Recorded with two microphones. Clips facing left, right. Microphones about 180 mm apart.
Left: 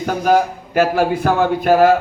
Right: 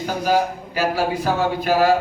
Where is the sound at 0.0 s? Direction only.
55° left (ahead or behind).